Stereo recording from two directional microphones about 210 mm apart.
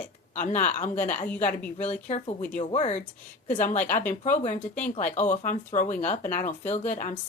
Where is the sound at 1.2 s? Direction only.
5° left (ahead or behind).